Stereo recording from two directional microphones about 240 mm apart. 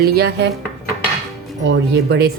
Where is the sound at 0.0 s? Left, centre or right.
Right.